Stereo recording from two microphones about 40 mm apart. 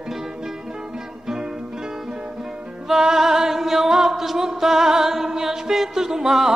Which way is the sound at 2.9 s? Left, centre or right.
Centre.